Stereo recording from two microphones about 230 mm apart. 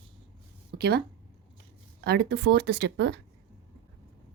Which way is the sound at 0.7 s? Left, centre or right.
Right.